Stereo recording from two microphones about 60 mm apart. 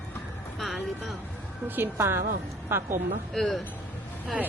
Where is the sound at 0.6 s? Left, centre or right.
Centre.